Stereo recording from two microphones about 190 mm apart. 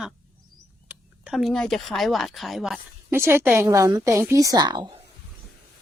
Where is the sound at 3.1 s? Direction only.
15° right (ahead or behind).